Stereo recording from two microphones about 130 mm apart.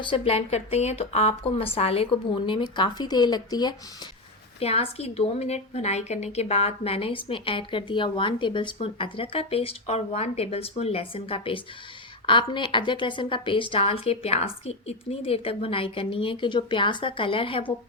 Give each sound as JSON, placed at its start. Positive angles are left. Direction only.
{"t": 0.0, "sound": "a woman's voice", "side_deg": 40}
{"t": 0.3, "sound": "a woman's voice", "side_deg": 55}
{"t": 4.6, "sound": "a woman's voice", "side_deg": 50}